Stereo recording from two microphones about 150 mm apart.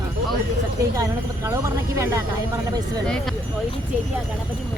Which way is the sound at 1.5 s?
20° right (ahead or behind).